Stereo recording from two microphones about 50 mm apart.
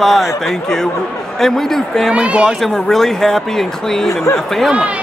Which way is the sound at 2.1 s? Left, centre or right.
Right.